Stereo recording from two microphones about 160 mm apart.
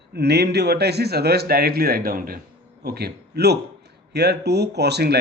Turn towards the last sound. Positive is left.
turn(degrees=-90)